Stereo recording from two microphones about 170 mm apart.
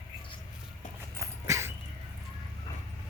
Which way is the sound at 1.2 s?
15° right (ahead or behind).